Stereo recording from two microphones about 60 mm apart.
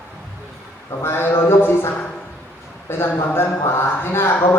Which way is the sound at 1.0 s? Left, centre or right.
Left.